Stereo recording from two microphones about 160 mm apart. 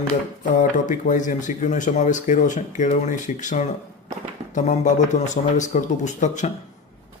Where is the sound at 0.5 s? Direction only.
55° left (ahead or behind).